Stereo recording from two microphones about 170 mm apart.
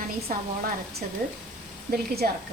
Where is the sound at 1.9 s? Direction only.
60° right (ahead or behind).